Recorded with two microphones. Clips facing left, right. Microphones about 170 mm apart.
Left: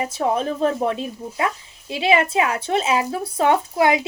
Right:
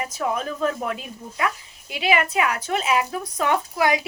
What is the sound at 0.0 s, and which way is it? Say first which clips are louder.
A woman's voice: left 4 dB; 30° left (ahead or behind).